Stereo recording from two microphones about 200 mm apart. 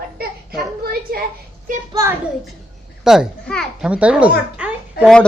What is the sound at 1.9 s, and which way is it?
Speech, 15° right (ahead or behind).